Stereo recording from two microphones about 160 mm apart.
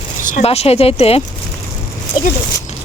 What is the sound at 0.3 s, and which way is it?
Speech, 45° left (ahead or behind).